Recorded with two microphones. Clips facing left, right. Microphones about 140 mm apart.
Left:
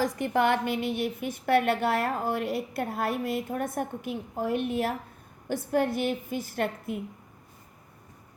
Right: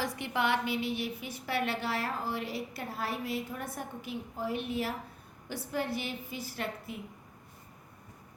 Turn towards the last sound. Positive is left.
turn(degrees=55)  # may be behind; listen again after turning